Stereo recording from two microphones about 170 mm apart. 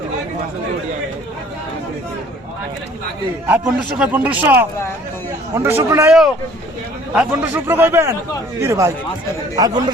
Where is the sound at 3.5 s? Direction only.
10° right (ahead or behind).